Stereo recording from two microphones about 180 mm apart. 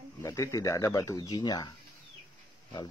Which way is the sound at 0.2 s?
15° left (ahead or behind).